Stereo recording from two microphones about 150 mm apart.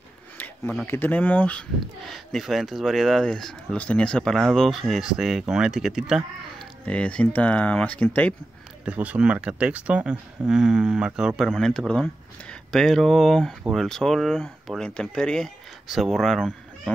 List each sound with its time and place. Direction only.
0.8 s speech: 15° left (ahead or behind); by 6.7 s 5° right (ahead or behind)
6.9 s speech: 10° left (ahead or behind)
8.8 s speech: 10° right (ahead or behind)